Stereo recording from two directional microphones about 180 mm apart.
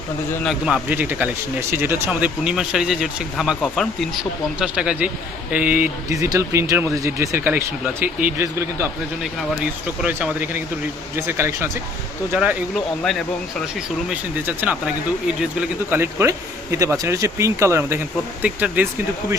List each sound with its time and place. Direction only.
0.4 s a man's voice: 5° right (ahead or behind)
4.6 s a man's voice: 5° right (ahead or behind)
10.0 s a man's voice: 10° right (ahead or behind)
13.7 s a man's voice: 10° right (ahead or behind)
15.9 s a man's voice: 15° right (ahead or behind)